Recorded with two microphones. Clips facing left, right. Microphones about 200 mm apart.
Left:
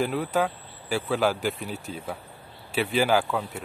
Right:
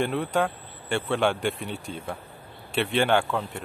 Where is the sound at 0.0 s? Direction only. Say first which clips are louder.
Even; 5° left (ahead or behind).